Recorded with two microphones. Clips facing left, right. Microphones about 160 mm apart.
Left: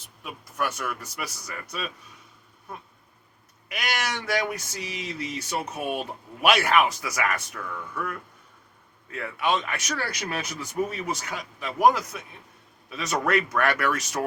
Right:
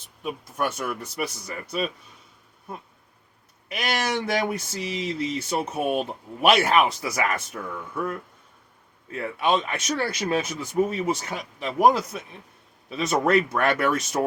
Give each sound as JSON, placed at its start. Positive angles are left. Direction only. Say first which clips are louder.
{"t": 0.2, "sound": "speech", "louder": "right 3 dB", "side_deg": -25}
{"t": 3.7, "sound": "speech", "louder": "right 4 dB", "side_deg": -30}